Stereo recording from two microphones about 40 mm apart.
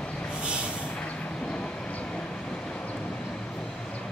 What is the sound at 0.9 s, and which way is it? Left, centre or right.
Vehicle, left.